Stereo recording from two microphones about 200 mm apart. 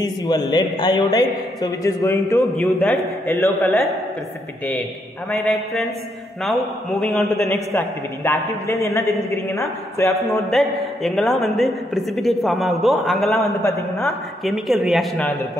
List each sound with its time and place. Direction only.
0.0 s a man's voice: 20° left (ahead or behind)
2.6 s a man's voice: centre (ahead or behind)
5.3 s a man's voice: 5° left (ahead or behind)
7.2 s a man's voice: 15° left (ahead or behind)
10.5 s a man's voice: centre (ahead or behind)
13.4 s a man's voice: 15° left (ahead or behind)
14.4 s a man's voice: centre (ahead or behind)